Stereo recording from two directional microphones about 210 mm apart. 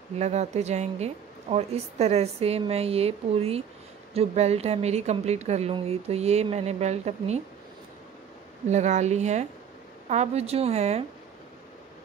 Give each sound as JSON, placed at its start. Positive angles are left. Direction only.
{"t": 0.2, "sound": "a woman's voice", "side_deg": -30}
{"t": 8.6, "sound": "speech", "side_deg": -35}